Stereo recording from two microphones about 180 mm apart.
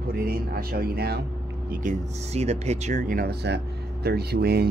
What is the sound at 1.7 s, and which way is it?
Speech, 45° right (ahead or behind).